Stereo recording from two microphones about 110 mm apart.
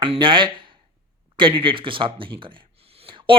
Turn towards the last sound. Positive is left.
turn(degrees=-50)  # may be behind; listen again after turning